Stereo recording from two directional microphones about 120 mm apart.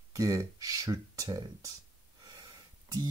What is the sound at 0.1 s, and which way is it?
Speech, 30° right (ahead or behind).